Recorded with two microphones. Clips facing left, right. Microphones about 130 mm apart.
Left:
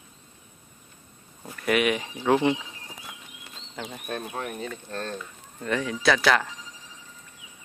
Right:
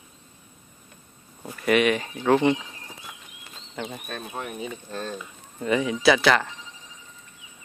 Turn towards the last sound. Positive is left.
turn(degrees=0)  # may be behind; listen again after turning